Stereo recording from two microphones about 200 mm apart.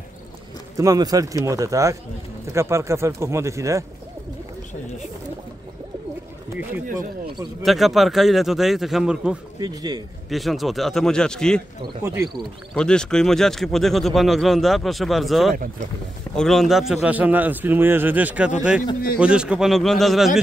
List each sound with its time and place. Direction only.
0.7 s a man's voice: 20° right (ahead or behind)
7.6 s speech: centre (ahead or behind)
9.6 s speech: 20° right (ahead or behind)
10.3 s speech: centre (ahead or behind)
12.0 s a man's voice: 10° right (ahead or behind)
12.7 s speech: 5° left (ahead or behind)
15.5 s speech: 45° right (ahead or behind)
16.3 s a man's voice: centre (ahead or behind)